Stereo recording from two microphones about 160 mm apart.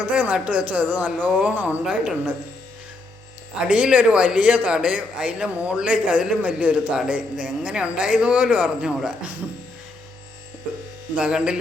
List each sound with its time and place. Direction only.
0.0 s speech: 10° right (ahead or behind)
3.7 s speech: 5° right (ahead or behind)
11.1 s speech: 5° right (ahead or behind)